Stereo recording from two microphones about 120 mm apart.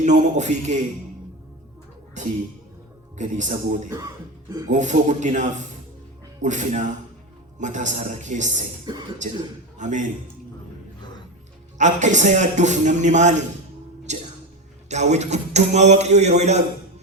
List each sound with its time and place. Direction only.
0.0 s a man's voice: 90° right
2.2 s a man's voice: 90° right
3.8 s speech: 35° right (ahead or behind)
4.7 s a man's voice: 90° right
8.9 s speech: 35° right (ahead or behind)
9.7 s a man's voice: 90° right
11.8 s a man's voice: 90° right; by 16.6 s 70° right (ahead or behind)